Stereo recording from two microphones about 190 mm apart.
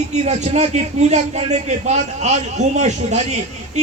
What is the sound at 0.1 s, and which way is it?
A man's voice, 35° right (ahead or behind).